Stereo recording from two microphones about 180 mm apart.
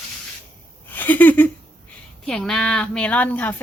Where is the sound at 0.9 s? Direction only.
10° left (ahead or behind).